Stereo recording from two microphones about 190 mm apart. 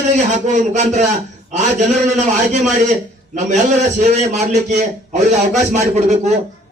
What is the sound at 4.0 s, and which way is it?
A man's voice, 35° right (ahead or behind).